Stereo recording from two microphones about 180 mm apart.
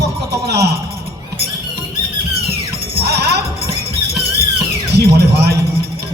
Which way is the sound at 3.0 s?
65° right (ahead or behind).